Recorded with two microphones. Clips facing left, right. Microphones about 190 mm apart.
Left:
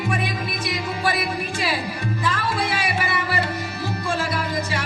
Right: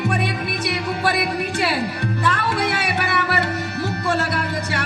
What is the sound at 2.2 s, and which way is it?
Music, 65° right (ahead or behind).